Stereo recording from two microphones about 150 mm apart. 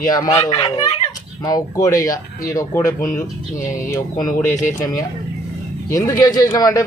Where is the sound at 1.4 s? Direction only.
25° left (ahead or behind).